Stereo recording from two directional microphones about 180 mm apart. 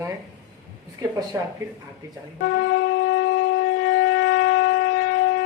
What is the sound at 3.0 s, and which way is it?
Shofar, 90° left.